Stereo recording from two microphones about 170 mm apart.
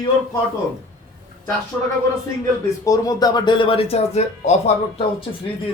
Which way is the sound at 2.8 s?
20° left (ahead or behind).